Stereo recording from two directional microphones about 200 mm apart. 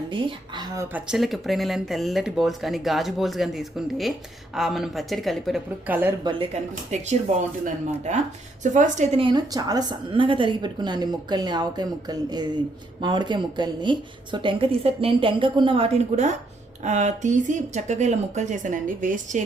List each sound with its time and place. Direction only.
0.1 s speech: 25° right (ahead or behind)
0.9 s speech: 5° right (ahead or behind)
6.2 s speech: 30° right (ahead or behind)
9.2 s a woman's voice: 20° right (ahead or behind); by 19.4 s 40° right (ahead or behind)